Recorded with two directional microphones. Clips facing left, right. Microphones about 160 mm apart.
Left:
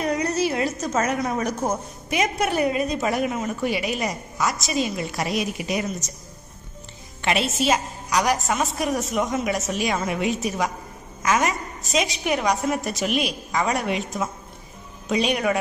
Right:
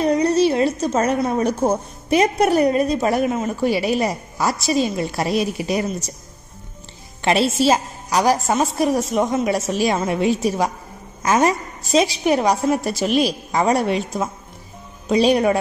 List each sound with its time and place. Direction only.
0.0 s a woman's voice: 30° right (ahead or behind)
7.2 s a woman's voice: 35° right (ahead or behind)